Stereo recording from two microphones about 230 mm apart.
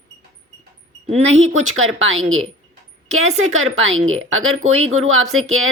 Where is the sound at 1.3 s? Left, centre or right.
Right.